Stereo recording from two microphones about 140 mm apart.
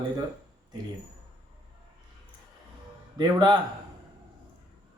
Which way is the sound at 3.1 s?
30° right (ahead or behind).